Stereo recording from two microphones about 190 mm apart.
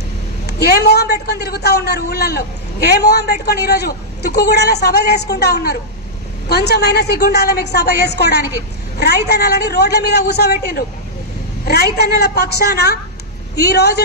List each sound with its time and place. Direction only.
0.5 s a man's voice: 60° left (ahead or behind)